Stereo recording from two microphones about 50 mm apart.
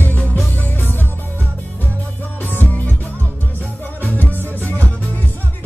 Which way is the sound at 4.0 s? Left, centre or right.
Left.